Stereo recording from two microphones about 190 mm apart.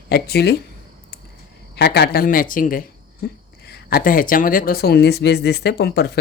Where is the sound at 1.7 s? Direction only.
60° left (ahead or behind).